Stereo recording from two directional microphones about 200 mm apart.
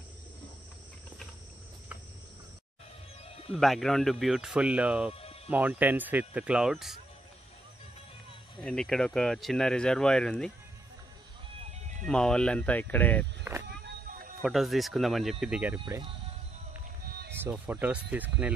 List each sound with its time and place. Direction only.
3.5 s speech: centre (ahead or behind)
8.6 s speech: 5° left (ahead or behind)
12.1 s speech: 5° left (ahead or behind)
13.4 s speech: 10° right (ahead or behind)
14.4 s speech: centre (ahead or behind)
15.8 s speech: 25° right (ahead or behind)
17.4 s speech: 10° right (ahead or behind)